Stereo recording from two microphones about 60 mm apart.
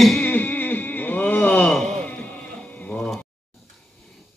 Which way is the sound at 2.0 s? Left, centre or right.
Left.